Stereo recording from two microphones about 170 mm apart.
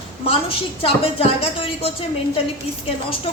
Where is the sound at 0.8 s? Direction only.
35° left (ahead or behind).